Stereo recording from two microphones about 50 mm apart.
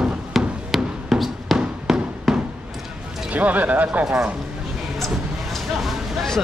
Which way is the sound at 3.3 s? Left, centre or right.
Right.